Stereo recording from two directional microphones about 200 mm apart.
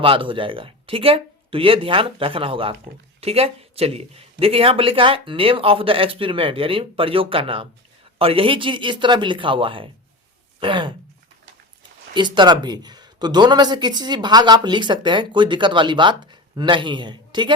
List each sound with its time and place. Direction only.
0.0 s a man's voice: 25° right (ahead or behind)
12.1 s a man's voice: 20° right (ahead or behind)